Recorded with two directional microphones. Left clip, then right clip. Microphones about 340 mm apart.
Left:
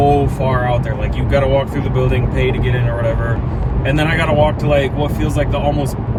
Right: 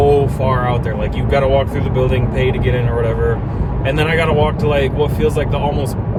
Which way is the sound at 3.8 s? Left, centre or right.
Centre.